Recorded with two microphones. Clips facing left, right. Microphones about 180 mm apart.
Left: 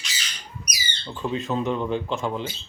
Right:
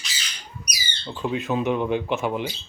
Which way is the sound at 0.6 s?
5° right (ahead or behind).